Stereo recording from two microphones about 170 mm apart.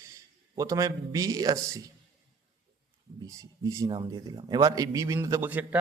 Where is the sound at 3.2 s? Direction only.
20° right (ahead or behind).